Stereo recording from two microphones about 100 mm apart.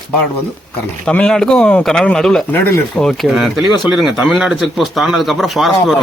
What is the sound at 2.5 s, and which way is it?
Speech, 20° left (ahead or behind).